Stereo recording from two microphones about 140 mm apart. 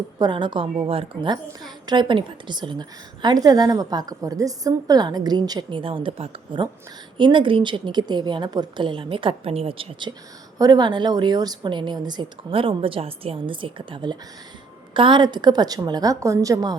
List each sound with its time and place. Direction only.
0.2 s a woman's voice: 35° right (ahead or behind)
10.6 s a woman's voice: 30° right (ahead or behind)